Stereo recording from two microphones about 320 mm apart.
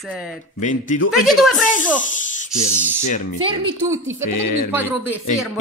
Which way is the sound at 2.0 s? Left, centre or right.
Left.